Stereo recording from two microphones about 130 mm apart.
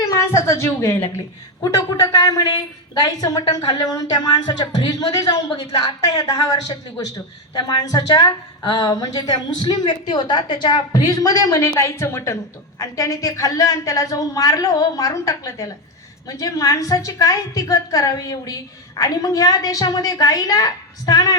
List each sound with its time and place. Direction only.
0.1 s a woman's voice: 20° left (ahead or behind)
7.5 s a woman's voice: 30° left (ahead or behind)